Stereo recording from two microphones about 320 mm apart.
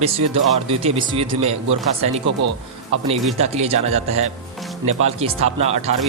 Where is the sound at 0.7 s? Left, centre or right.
Centre.